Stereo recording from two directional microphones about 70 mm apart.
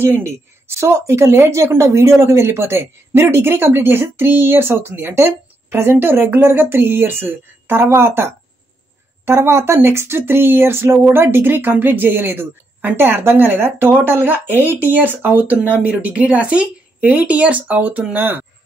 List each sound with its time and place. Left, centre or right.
0.0 s a woman's voice: right